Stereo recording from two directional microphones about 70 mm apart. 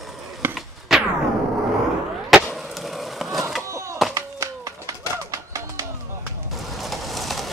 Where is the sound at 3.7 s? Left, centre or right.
Right.